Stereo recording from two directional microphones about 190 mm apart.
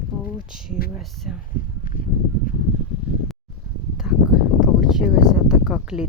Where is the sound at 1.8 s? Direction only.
45° left (ahead or behind).